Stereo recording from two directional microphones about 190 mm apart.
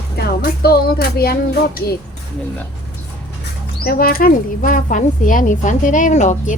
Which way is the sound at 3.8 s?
50° left (ahead or behind).